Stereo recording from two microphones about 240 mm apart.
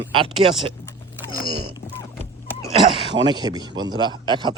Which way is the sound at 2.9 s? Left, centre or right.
Centre.